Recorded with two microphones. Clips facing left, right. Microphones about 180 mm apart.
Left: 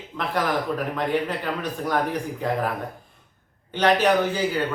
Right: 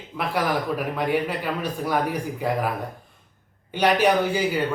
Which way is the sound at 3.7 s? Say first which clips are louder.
Even; 10° right (ahead or behind).